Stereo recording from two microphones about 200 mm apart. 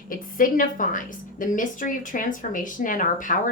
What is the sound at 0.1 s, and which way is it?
A woman's voice, 45° left (ahead or behind).